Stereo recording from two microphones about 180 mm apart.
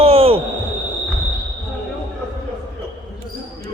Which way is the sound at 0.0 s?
30° right (ahead or behind).